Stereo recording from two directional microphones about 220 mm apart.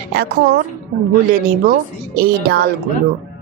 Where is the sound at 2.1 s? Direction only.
45° right (ahead or behind).